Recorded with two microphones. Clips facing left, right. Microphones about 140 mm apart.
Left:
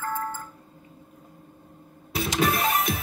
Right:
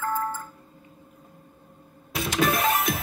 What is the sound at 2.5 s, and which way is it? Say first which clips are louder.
Music: right 1 dB; 35° right (ahead or behind).